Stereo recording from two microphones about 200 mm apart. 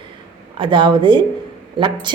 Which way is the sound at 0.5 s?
25° right (ahead or behind).